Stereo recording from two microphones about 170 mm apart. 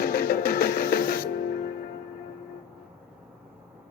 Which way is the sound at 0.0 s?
60° left (ahead or behind).